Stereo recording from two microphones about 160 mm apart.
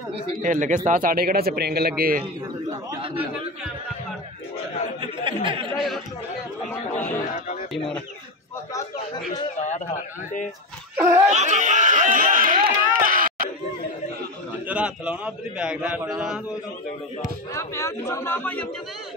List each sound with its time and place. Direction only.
0.4 s a man's voice: 50° right (ahead or behind)
5.0 s speech: 30° right (ahead or behind)
5.8 s speech: centre (ahead or behind)
9.6 s a sound: 45° left (ahead or behind)
11.0 s a man's voice: 15° right (ahead or behind)
11.2 s run: 45° right (ahead or behind)
14.7 s a man's voice: 10° right (ahead or behind)
17.5 s speech: 20° left (ahead or behind)